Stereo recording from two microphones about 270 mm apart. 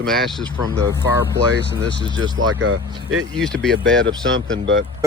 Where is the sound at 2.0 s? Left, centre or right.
Centre.